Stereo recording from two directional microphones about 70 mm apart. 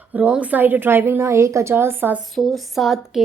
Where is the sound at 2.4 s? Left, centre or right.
Centre.